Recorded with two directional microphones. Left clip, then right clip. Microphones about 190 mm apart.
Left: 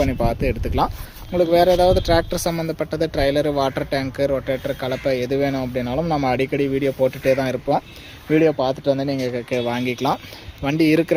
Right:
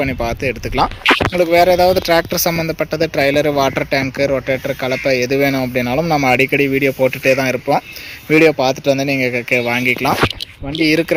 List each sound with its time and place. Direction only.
0.0 s speech: 5° right (ahead or behind)
10.8 s speech: 10° left (ahead or behind)